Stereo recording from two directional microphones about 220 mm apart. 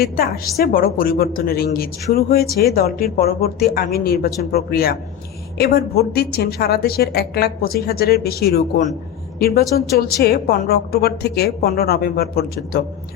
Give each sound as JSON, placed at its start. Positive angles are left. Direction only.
{"t": 0.0, "sound": "a woman's voice", "side_deg": 45}